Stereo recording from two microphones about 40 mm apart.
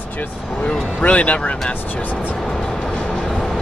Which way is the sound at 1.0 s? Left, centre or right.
Left.